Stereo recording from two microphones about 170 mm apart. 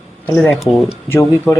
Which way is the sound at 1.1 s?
15° left (ahead or behind).